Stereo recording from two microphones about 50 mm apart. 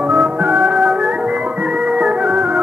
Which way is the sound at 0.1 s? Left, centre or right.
Right.